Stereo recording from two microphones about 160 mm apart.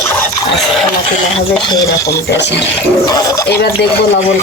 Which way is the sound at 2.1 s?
90° left.